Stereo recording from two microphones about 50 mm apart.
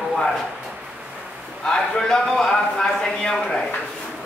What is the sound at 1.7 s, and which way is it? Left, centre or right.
A man's voice, centre.